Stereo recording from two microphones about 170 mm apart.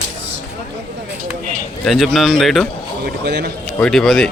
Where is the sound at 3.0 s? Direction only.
75° right (ahead or behind).